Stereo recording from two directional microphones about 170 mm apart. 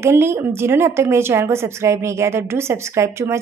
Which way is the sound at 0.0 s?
15° right (ahead or behind).